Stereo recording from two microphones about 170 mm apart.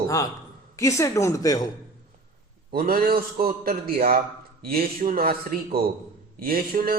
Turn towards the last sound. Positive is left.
turn(degrees=-60)  # may be behind; listen again after turning